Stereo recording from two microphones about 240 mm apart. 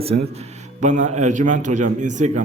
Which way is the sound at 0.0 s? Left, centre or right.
Right.